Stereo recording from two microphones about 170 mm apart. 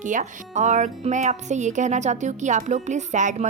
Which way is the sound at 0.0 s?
50° right (ahead or behind).